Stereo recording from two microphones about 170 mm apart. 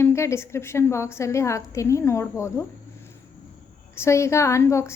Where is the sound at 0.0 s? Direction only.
15° left (ahead or behind).